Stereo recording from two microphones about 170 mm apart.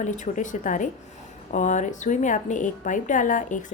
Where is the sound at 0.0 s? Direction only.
50° left (ahead or behind).